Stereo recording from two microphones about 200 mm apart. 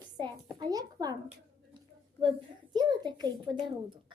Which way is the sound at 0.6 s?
20° right (ahead or behind).